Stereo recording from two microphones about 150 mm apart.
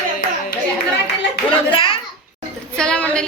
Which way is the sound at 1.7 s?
35° left (ahead or behind).